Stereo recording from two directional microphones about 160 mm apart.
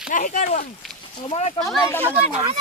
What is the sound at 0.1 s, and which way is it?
Speech, 55° left (ahead or behind).